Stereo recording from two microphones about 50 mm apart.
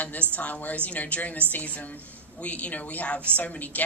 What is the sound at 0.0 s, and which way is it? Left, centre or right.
Speech, left.